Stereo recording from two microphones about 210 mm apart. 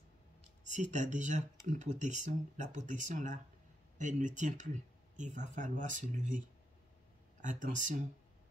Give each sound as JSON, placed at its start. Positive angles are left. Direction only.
{"t": 0.7, "sound": "speech", "side_deg": -35}
{"t": 7.4, "sound": "speech", "side_deg": -35}